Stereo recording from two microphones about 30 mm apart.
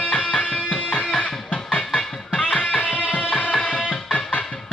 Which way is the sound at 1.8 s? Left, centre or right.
Centre.